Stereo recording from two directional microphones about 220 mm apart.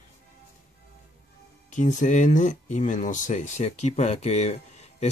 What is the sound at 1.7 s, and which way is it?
Speech, 35° left (ahead or behind).